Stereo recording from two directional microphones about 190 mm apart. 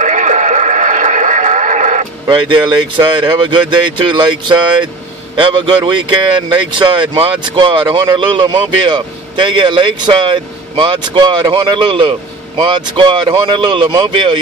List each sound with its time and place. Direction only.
0.0 s radio: 40° right (ahead or behind)
2.2 s speech: 25° right (ahead or behind)